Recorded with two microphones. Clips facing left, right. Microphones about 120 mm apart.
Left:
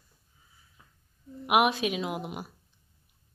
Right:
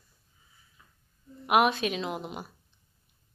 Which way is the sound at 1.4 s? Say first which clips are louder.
Even; 10° left (ahead or behind).